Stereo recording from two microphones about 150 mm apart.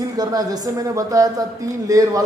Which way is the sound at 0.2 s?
25° right (ahead or behind).